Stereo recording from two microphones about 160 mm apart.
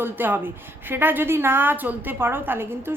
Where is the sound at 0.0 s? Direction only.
10° right (ahead or behind).